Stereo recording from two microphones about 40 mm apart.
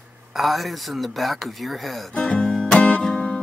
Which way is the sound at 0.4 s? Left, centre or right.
Centre.